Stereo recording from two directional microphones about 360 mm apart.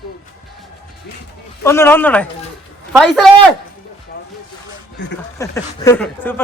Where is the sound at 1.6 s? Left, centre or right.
Centre.